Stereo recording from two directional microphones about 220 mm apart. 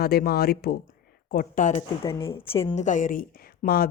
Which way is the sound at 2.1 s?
20° left (ahead or behind).